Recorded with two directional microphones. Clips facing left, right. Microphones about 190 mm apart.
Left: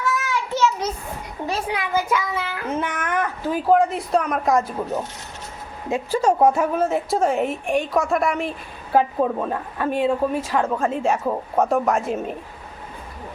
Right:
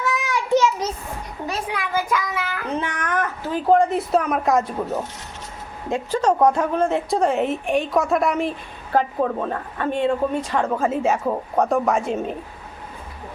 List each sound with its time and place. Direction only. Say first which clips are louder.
0.0 s a sound: even; 15° right (ahead or behind)
1.5 s a child's voice: left 2 dB; 25° left (ahead or behind)
2.7 s speech: even; 5° left (ahead or behind)
5.9 s speech: even; 10° left (ahead or behind)
8.9 s speech: left 1 dB; 10° left (ahead or behind)